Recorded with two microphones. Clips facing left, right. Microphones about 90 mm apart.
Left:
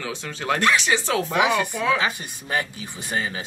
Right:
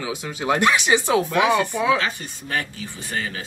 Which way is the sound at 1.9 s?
15° left (ahead or behind).